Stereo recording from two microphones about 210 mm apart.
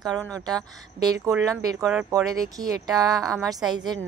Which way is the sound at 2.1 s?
15° right (ahead or behind).